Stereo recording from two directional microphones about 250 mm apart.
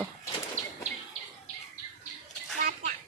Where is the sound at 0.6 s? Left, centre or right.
Right.